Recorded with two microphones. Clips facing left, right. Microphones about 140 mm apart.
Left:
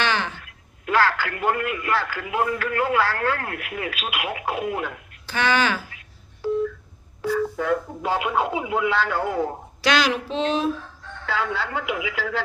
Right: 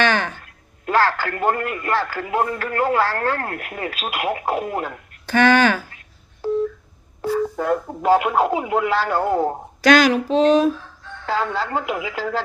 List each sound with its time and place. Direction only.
0.0 s speech: 50° right (ahead or behind)